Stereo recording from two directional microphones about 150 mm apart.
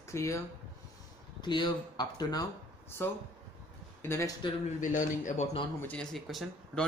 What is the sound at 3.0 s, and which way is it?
A man's voice, 15° left (ahead or behind).